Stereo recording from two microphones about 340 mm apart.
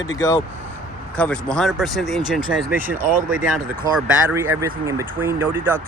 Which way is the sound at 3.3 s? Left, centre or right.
Centre.